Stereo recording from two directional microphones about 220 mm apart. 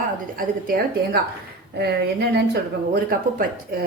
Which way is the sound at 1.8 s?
45° right (ahead or behind).